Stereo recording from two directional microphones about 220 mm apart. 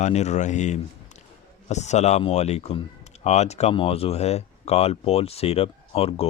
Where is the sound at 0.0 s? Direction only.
30° left (ahead or behind).